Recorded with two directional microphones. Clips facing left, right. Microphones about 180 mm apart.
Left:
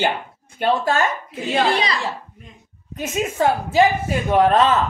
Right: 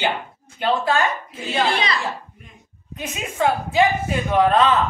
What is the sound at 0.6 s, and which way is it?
Speech, 45° left (ahead or behind).